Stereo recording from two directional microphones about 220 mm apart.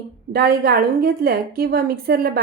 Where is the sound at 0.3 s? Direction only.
45° right (ahead or behind).